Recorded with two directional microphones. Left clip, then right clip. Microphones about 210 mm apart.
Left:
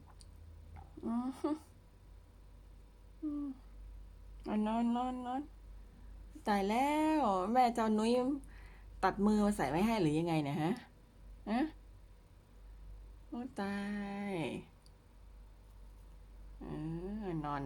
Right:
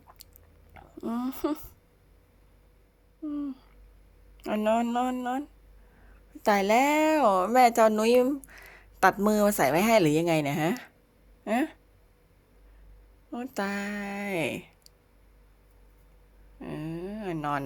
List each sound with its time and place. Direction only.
0.2 s a sound: 15° right (ahead or behind)
0.7 s speech: 15° right (ahead or behind)
4.4 s a woman's voice: 25° right (ahead or behind)
13.3 s a woman's voice: 25° right (ahead or behind)
16.6 s a woman's voice: 25° right (ahead or behind)